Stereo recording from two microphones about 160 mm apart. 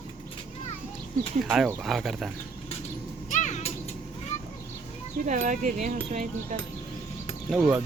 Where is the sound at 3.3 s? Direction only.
45° left (ahead or behind).